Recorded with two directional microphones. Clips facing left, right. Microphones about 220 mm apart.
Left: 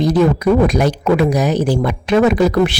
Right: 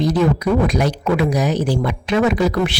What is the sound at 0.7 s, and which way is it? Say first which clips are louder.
Speech: left 4 dB; 50° left (ahead or behind).